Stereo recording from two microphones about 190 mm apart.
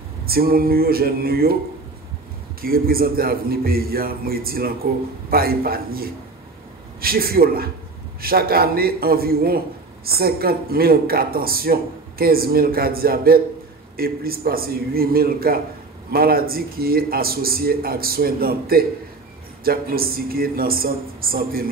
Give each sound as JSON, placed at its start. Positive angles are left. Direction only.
{"t": 0.3, "sound": "speech", "side_deg": -50}
{"t": 2.6, "sound": "speech", "side_deg": -50}